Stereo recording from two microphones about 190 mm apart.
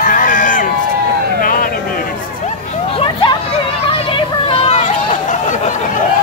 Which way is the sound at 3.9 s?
30° left (ahead or behind).